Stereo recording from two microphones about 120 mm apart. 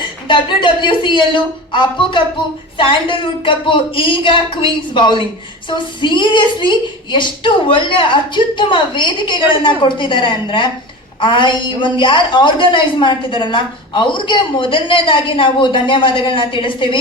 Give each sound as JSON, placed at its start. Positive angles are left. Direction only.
{"t": 0.3, "sound": "a woman's voice", "side_deg": 40}